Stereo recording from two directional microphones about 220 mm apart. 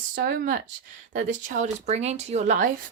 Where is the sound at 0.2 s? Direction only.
50° right (ahead or behind).